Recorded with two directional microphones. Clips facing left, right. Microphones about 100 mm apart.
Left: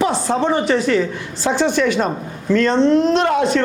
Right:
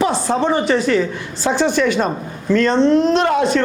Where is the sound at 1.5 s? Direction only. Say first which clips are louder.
Right 1 dB; 15° right (ahead or behind).